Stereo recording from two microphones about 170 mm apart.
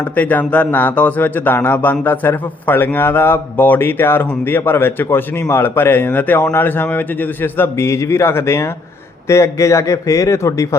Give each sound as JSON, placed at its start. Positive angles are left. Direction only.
{"t": 0.0, "sound": "speech", "side_deg": 10}